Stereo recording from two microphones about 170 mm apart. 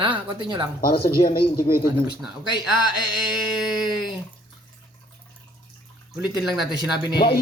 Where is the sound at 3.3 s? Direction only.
5° right (ahead or behind).